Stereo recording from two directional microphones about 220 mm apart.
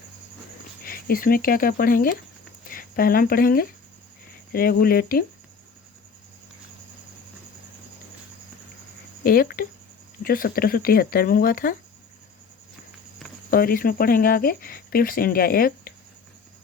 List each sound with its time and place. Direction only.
0.9 s speech: 40° left (ahead or behind)
9.2 s speech: 40° left (ahead or behind)
13.5 s speech: 40° left (ahead or behind)